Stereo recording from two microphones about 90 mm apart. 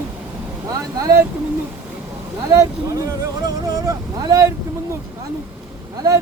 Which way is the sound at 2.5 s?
40° right (ahead or behind).